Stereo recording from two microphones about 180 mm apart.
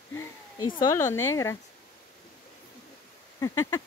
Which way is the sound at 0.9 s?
15° left (ahead or behind).